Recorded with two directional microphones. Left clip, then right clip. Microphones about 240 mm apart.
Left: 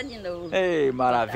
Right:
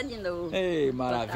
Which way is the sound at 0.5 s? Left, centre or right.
Centre.